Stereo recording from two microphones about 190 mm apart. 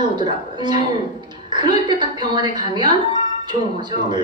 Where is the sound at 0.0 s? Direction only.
25° right (ahead or behind).